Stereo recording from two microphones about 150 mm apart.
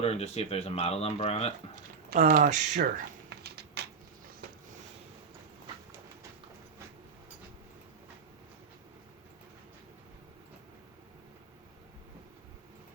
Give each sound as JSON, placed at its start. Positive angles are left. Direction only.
{"t": 0.0, "sound": "speech", "side_deg": 45}
{"t": 2.0, "sound": "speech", "side_deg": -60}